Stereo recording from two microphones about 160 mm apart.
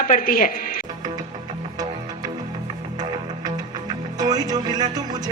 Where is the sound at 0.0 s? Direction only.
60° left (ahead or behind).